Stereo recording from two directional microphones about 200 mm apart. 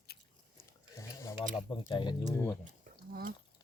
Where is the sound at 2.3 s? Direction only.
15° left (ahead or behind).